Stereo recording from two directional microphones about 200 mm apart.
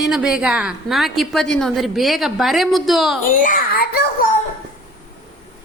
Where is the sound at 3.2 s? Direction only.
40° left (ahead or behind).